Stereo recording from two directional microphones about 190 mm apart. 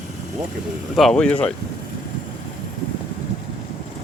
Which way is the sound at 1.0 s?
5° left (ahead or behind).